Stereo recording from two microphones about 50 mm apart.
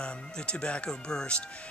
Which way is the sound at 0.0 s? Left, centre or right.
Centre.